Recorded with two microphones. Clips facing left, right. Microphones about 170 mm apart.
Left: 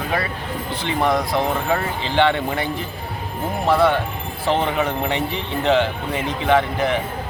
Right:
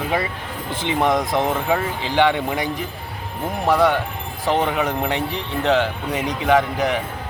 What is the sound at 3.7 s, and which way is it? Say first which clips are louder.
Speech: even; 15° right (ahead or behind).